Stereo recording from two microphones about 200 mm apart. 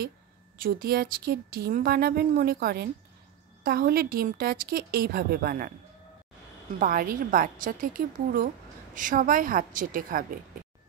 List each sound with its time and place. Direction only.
0.6 s speech: 45° right (ahead or behind)
6.8 s speech: 45° right (ahead or behind)